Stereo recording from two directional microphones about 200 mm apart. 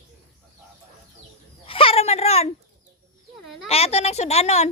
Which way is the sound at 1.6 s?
30° left (ahead or behind).